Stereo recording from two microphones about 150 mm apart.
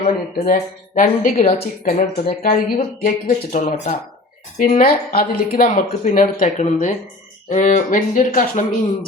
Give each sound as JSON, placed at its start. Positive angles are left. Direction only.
{"t": 0.0, "sound": "speech", "side_deg": 55}